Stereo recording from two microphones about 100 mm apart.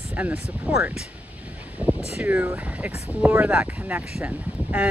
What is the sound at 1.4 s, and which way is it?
Vehicle, 15° right (ahead or behind).